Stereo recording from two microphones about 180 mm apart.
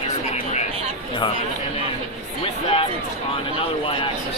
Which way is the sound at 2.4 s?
30° left (ahead or behind).